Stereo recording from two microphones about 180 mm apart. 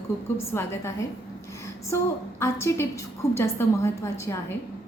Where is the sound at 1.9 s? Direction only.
15° left (ahead or behind).